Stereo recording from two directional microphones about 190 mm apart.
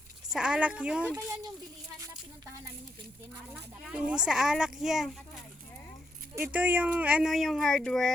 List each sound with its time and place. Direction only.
0.3 s speech: 5° right (ahead or behind)
1.1 s speech: 20° right (ahead or behind)
3.5 s speech: 5° right (ahead or behind)